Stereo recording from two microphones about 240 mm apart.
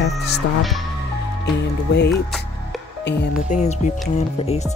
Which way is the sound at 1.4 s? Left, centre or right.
Left.